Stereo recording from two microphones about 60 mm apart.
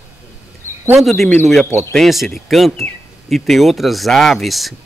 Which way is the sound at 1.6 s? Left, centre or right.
Left.